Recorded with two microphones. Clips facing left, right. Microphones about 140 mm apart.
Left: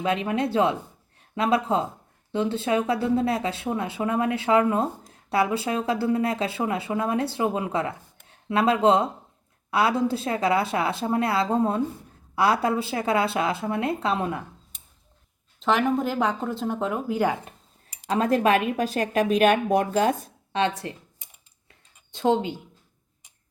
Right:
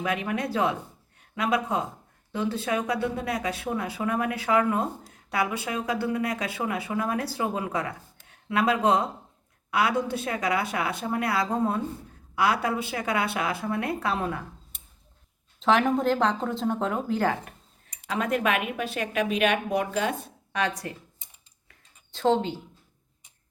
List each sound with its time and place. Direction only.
0.0 s speech: 25° left (ahead or behind)
15.6 s speech: centre (ahead or behind)
18.0 s speech: 35° left (ahead or behind)
20.5 s speech: 25° left (ahead or behind)
21.7 s a sound: 15° left (ahead or behind)